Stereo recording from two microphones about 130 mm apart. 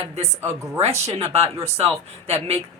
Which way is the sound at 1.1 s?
50° right (ahead or behind).